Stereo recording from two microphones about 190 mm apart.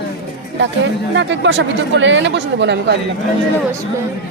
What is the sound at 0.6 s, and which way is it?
Speech, 75° right (ahead or behind).